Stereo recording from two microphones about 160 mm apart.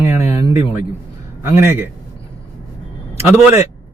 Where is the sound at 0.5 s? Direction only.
15° right (ahead or behind).